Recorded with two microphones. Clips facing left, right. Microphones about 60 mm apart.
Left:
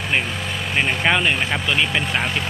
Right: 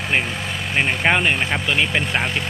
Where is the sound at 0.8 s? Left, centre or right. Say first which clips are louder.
Right 1 dB; centre.